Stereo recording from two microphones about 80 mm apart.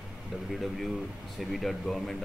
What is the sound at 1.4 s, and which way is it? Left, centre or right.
Speech, centre.